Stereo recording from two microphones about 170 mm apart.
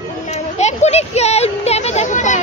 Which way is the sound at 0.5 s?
40° left (ahead or behind).